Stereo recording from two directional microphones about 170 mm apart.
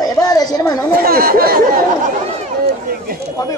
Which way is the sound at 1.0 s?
60° right (ahead or behind).